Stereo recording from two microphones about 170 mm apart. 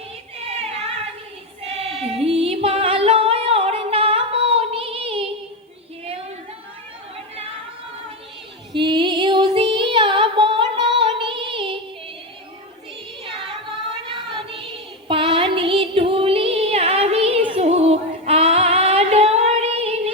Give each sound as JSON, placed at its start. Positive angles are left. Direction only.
{"t": 1.6, "sound": "music", "side_deg": -35}
{"t": 8.7, "sound": "music", "side_deg": -30}
{"t": 13.2, "sound": "child singing", "side_deg": -30}